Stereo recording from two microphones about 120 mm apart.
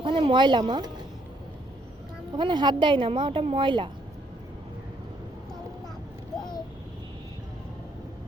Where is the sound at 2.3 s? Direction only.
40° right (ahead or behind).